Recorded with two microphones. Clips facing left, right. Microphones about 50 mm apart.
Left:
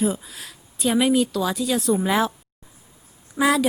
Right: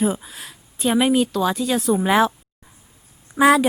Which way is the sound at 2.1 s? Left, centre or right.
Right.